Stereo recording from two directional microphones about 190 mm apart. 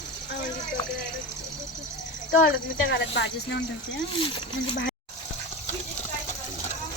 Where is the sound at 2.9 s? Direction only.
65° left (ahead or behind).